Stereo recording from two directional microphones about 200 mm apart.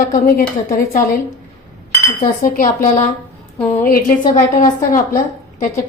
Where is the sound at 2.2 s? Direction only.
45° left (ahead or behind).